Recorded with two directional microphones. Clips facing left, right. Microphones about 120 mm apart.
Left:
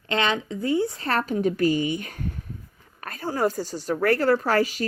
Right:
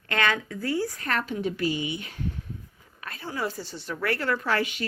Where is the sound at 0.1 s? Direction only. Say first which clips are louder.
Left 2 dB; 20° left (ahead or behind).